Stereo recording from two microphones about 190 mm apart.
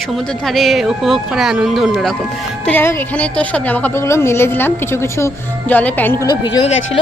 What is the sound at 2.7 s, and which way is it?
A woman's voice, 10° left (ahead or behind).